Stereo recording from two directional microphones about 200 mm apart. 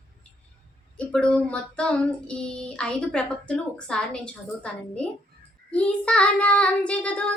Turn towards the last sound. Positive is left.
turn(degrees=5)  # may be behind; listen again after turning